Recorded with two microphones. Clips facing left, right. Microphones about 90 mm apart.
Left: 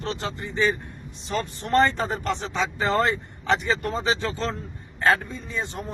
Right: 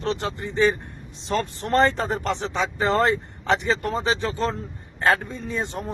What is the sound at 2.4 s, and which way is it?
Speech, 20° right (ahead or behind).